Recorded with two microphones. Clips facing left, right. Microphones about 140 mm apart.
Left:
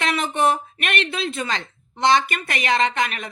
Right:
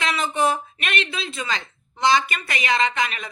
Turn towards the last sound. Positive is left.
turn(degrees=55)  # may be behind; listen again after turning